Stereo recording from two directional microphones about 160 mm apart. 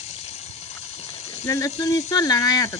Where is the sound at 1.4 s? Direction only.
20° left (ahead or behind).